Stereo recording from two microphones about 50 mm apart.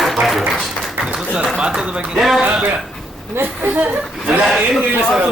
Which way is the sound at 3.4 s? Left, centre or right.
Right.